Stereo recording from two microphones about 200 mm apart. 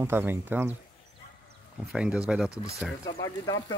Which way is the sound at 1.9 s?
5° right (ahead or behind).